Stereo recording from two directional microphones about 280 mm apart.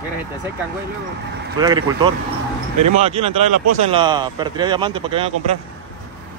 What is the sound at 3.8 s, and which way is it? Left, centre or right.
Speech, centre.